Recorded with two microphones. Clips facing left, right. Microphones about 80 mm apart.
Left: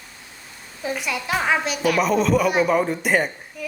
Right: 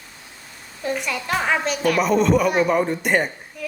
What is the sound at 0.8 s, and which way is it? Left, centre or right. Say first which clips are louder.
A woman's voice: right 1 dB; centre.